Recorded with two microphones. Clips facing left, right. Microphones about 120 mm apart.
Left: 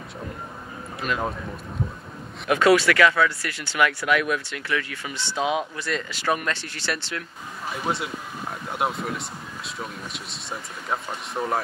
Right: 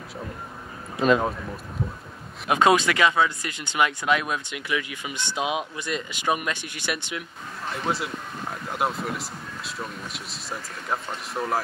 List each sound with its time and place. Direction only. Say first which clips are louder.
0.9 s speech: right 8 dB; 25° right (ahead or behind)
2.4 s speech: left 1 dB; 20° right (ahead or behind)
7.7 s speech: even; centre (ahead or behind)